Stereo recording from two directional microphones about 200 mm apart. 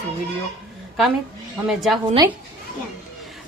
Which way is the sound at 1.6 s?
5° right (ahead or behind).